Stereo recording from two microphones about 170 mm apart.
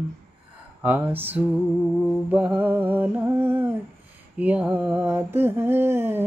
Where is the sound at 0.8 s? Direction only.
10° right (ahead or behind).